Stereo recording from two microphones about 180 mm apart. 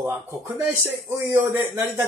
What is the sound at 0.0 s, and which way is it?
Speech, 15° right (ahead or behind).